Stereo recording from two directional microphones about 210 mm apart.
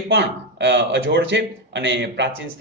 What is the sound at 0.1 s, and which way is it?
A man's voice, 55° right (ahead or behind).